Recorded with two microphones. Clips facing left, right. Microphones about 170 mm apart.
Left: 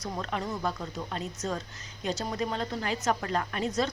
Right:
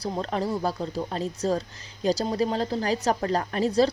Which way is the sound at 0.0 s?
35° right (ahead or behind).